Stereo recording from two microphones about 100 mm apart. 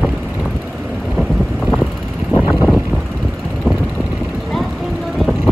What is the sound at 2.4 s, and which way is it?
Vehicle, 5° left (ahead or behind).